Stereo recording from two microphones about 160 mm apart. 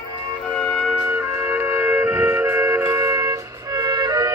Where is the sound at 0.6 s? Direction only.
5° right (ahead or behind).